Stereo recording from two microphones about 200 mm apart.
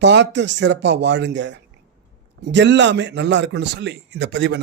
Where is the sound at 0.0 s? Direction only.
60° right (ahead or behind).